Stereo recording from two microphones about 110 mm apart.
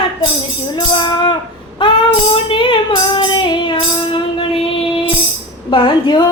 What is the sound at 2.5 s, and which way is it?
Female singing, 50° left (ahead or behind).